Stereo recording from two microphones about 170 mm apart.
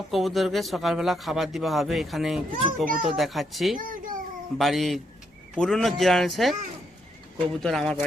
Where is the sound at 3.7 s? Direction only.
50° right (ahead or behind).